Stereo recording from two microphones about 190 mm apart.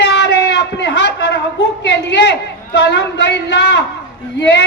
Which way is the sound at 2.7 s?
65° left (ahead or behind).